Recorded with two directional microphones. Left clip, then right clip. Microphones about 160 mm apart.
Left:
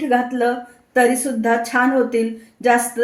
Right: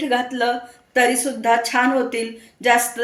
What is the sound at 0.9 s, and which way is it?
Speech, 50° left (ahead or behind).